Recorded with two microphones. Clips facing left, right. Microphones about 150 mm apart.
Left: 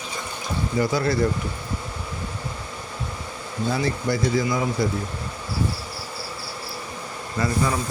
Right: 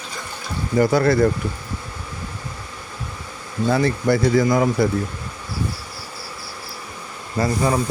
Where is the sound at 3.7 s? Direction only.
60° right (ahead or behind).